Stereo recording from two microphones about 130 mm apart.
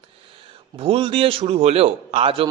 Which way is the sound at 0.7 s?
45° right (ahead or behind).